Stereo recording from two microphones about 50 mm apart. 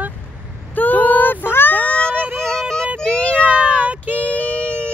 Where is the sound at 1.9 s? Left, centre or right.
Left.